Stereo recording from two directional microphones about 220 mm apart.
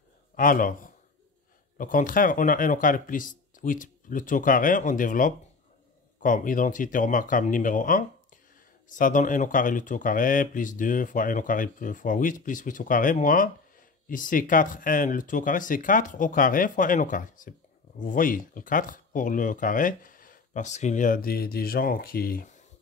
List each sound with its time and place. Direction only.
0.4 s a man's voice: 40° left (ahead or behind)